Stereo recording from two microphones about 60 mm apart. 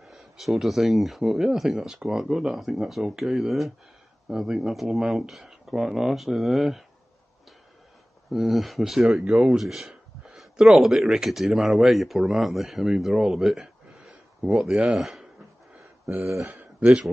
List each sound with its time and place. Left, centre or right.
0.0 s speech: centre
8.3 s speech: centre
14.7 s speech: centre
15.0 s speech: centre